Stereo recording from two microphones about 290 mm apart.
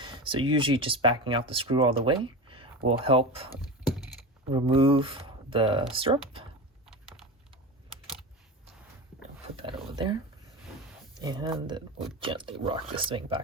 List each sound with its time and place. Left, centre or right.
0.0 s speech: centre
4.5 s speech: centre
9.6 s speech: centre
11.2 s speech: centre